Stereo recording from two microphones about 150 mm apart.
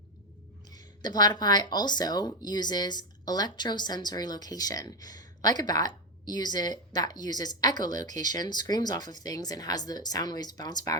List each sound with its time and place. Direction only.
0.7 s speech: 25° left (ahead or behind)